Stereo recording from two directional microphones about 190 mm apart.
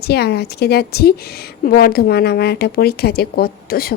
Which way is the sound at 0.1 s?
60° left (ahead or behind).